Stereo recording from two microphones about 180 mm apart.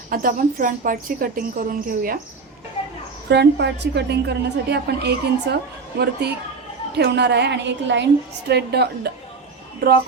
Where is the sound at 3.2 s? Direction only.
70° right (ahead or behind).